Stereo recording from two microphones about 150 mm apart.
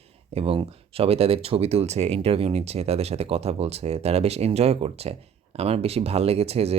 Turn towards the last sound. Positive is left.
turn(degrees=-45)  # may be behind; listen again after turning